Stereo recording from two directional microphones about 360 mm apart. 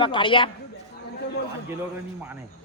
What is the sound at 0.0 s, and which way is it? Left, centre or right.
Speech, centre.